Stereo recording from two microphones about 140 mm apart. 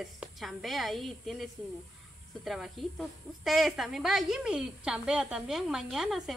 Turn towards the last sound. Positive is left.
turn(degrees=0)  # may be behind; listen again after turning